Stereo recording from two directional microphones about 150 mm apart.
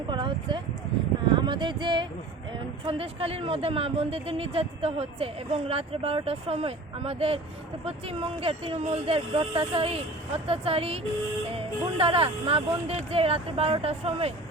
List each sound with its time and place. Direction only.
0.1 s speech: 30° right (ahead or behind)